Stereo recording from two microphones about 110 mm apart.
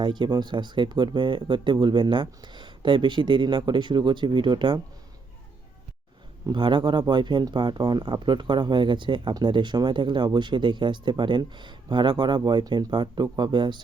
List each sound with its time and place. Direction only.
0.0 s speech: 45° right (ahead or behind)
6.4 s speech: 45° right (ahead or behind)